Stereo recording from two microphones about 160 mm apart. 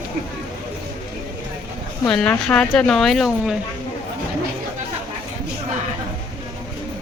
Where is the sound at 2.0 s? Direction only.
5° left (ahead or behind).